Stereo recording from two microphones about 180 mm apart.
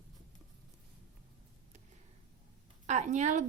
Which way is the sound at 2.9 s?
40° right (ahead or behind).